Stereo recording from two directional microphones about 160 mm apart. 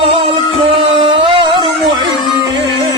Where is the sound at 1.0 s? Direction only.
35° right (ahead or behind).